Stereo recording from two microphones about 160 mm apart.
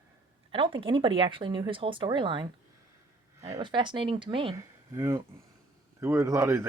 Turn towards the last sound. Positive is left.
turn(degrees=-15)  # may be behind; listen again after turning